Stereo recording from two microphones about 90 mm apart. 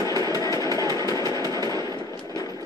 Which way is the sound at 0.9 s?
40° left (ahead or behind).